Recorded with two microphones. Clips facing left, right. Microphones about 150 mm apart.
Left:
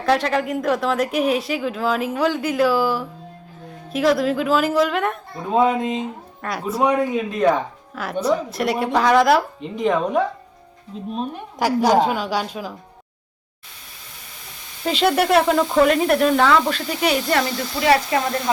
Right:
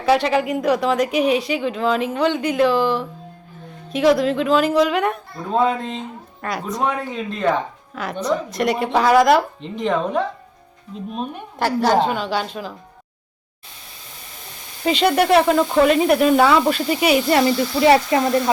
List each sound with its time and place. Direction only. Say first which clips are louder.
0.0 s speech: right 2 dB; centre (ahead or behind)
5.5 s a woman's voice: left 1 dB; 15° left (ahead or behind)
6.4 s a woman's voice: left 2 dB; centre (ahead or behind)
11.6 s a woman's voice: left 1 dB; 10° left (ahead or behind)
14.8 s speech: right 2 dB; centre (ahead or behind)
17.7 s speech: right 2 dB; 25° right (ahead or behind)